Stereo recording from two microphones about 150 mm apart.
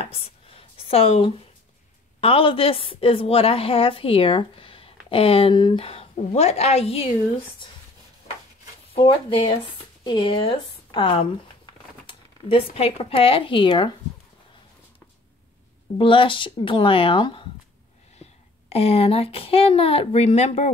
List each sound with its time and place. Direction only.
0.0 s a sound: 40° left (ahead or behind)
2.1 s a woman's voice: 40° left (ahead or behind)
8.9 s a woman's voice: 35° left (ahead or behind)
16.0 s a woman's voice: 35° left (ahead or behind)